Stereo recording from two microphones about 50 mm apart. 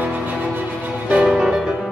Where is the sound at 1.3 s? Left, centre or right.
Centre.